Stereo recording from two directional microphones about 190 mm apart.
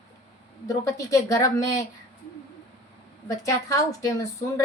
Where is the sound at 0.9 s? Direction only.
15° left (ahead or behind).